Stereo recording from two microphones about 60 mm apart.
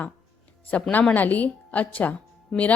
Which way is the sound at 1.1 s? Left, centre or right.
Left.